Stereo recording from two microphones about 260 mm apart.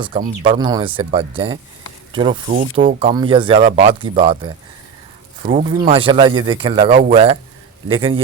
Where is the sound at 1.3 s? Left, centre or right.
Right.